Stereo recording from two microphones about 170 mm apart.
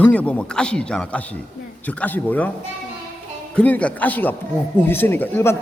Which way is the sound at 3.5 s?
10° left (ahead or behind).